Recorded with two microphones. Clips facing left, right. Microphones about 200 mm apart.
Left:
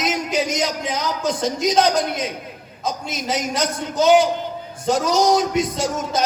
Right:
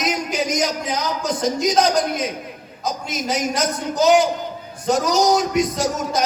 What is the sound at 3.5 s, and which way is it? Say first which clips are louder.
A man's voice: right 1 dB; 25° left (ahead or behind).